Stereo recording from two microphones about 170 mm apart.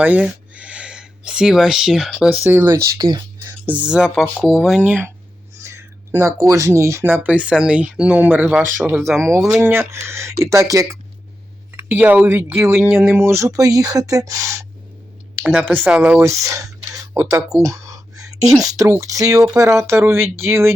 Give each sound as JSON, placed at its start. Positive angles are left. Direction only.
{"t": 0.0, "sound": "speech", "side_deg": -5}
{"t": 5.6, "sound": "a sound", "side_deg": -15}
{"t": 6.4, "sound": "speech", "side_deg": -20}
{"t": 15.7, "sound": "speech", "side_deg": -10}
{"t": 16.2, "sound": "speech", "side_deg": -20}
{"t": 17.6, "sound": "a sound", "side_deg": -20}
{"t": 18.6, "sound": "speech", "side_deg": -20}